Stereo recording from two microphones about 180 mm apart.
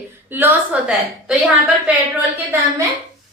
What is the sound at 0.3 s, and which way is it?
A woman's voice, 10° right (ahead or behind).